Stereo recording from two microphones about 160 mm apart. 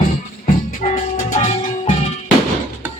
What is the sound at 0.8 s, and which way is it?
Music, 45° left (ahead or behind).